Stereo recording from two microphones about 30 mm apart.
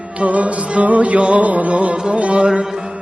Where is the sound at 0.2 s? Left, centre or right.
Right.